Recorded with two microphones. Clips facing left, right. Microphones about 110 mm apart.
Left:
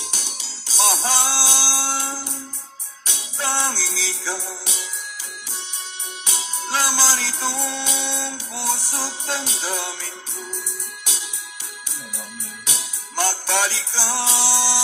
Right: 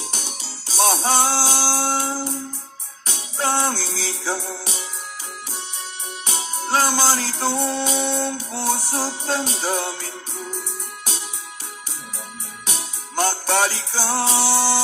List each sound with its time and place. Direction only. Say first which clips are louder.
0.0 s music: right 3 dB; 40° right (ahead or behind)
6.2 s music: right 3 dB; 45° right (ahead or behind)
12.6 s music: right 4 dB; 40° right (ahead or behind)